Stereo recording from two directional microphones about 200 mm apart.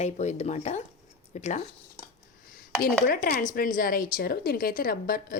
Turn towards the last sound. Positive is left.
turn(degrees=50)  # may be behind; listen again after turning